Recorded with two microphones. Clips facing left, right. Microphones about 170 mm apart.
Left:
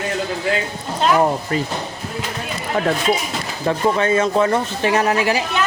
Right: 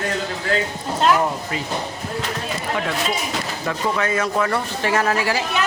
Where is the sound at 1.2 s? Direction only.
40° left (ahead or behind).